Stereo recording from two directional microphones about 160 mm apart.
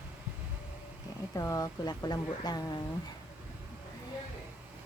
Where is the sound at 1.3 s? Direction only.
20° left (ahead or behind).